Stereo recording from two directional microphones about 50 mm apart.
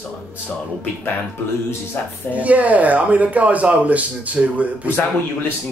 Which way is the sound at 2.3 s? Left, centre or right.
Right.